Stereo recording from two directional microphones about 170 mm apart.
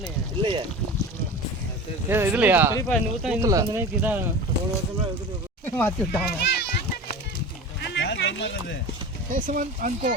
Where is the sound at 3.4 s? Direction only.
20° right (ahead or behind).